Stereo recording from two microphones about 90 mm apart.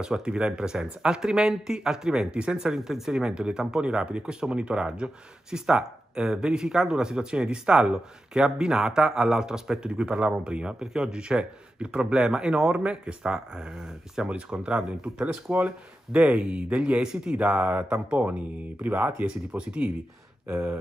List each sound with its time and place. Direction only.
0.0 s speech: 10° right (ahead or behind)
20.4 s speech: 25° right (ahead or behind)